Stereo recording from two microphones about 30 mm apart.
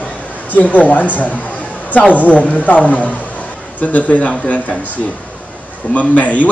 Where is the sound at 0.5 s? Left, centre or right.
Left.